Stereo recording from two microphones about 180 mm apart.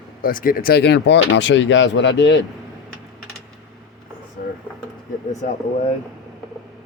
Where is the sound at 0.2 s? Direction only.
50° left (ahead or behind); by 2.4 s 80° left.